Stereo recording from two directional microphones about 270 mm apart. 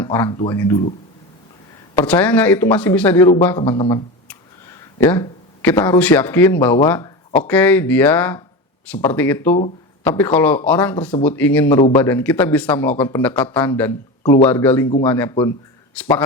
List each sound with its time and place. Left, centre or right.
0.0 s speech: centre
2.0 s a man's voice: centre
3.8 s a sound: centre
4.9 s speech: centre
11.8 s a man's voice: centre
12.0 s speech: centre